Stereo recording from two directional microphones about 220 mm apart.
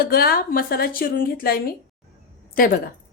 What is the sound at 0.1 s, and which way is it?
A woman's voice, 45° left (ahead or behind).